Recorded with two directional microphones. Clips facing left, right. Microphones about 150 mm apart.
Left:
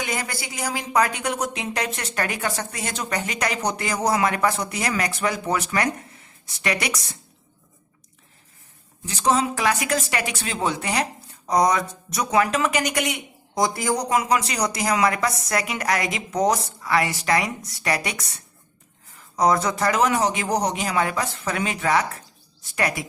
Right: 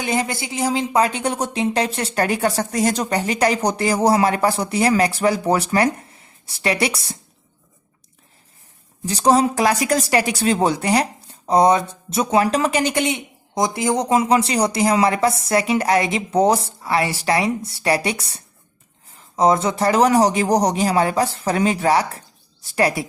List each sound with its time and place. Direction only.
0.0 s speech: 25° right (ahead or behind)
9.0 s speech: 35° right (ahead or behind)